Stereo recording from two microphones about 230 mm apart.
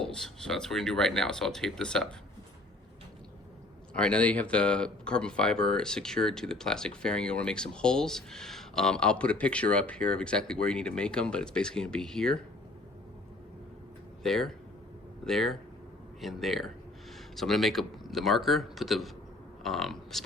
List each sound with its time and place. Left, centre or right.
0.0 s speech: centre
3.9 s speech: centre
14.3 s speech: centre